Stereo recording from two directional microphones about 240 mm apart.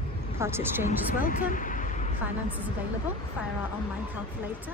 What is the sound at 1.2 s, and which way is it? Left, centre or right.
Vehicle, left.